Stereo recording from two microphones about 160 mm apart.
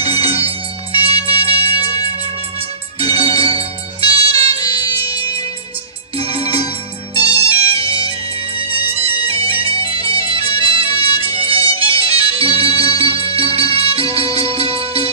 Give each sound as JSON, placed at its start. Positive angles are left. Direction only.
{"t": 0.0, "sound": "music", "side_deg": -40}
{"t": 3.0, "sound": "music", "side_deg": -35}
{"t": 4.6, "sound": "music", "side_deg": 25}
{"t": 6.1, "sound": "music", "side_deg": -35}